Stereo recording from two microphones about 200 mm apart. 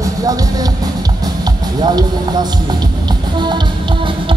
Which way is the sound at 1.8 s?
20° right (ahead or behind).